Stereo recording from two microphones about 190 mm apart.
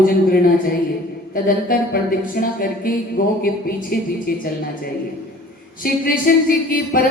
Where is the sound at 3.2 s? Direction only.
45° left (ahead or behind).